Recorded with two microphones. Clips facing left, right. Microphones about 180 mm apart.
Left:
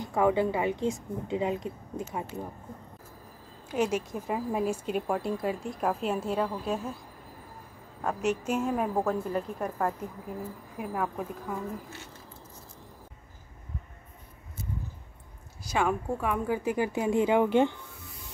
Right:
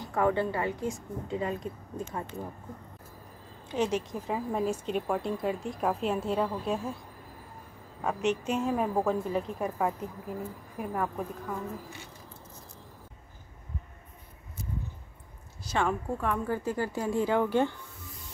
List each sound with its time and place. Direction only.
0.0 s speech: 10° left (ahead or behind)
3.6 s speech: 10° left (ahead or behind)
8.0 s speech: centre (ahead or behind)
15.6 s speech: 10° left (ahead or behind)